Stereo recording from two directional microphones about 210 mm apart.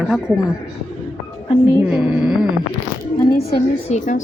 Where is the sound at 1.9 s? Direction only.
5° right (ahead or behind).